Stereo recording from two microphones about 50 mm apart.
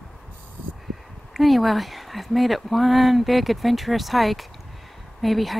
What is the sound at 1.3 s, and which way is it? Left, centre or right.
Speech, centre.